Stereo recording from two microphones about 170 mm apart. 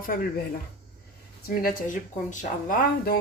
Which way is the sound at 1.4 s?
55° left (ahead or behind).